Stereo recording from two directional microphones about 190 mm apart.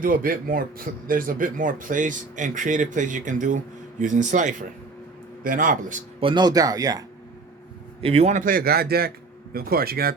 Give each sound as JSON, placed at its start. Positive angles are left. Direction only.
{"t": 0.0, "sound": "speech", "side_deg": -50}
{"t": 6.1, "sound": "speech", "side_deg": -25}
{"t": 8.0, "sound": "speech", "side_deg": -35}